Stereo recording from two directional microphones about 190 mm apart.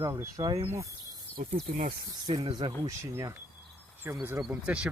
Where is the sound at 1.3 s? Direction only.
30° left (ahead or behind).